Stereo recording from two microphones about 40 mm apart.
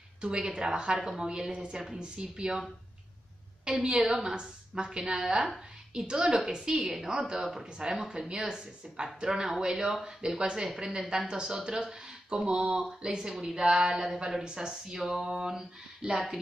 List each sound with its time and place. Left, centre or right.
0.2 s speech: right
3.6 s speech: centre
13.6 s speech: right